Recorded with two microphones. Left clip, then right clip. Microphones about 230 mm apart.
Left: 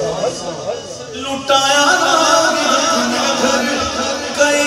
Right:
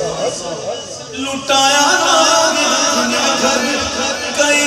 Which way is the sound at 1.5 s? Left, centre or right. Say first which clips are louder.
Even; right.